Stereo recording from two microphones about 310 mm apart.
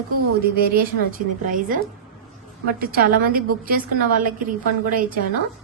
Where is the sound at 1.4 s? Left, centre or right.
Right.